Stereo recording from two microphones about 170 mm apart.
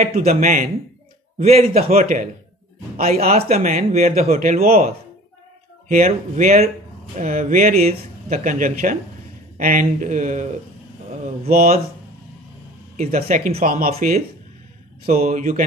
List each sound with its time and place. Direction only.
0.0 s speech: 55° right (ahead or behind)
0.3 s speech: 45° right (ahead or behind)
3.1 s speech: 40° right (ahead or behind)
11.4 s speech: 55° right (ahead or behind)
12.9 s speech: 40° right (ahead or behind)
13.5 s speech: 60° right (ahead or behind)
13.9 s speech: 40° right (ahead or behind)